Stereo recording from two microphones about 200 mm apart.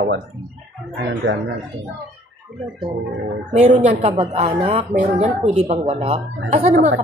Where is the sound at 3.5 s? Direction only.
35° right (ahead or behind).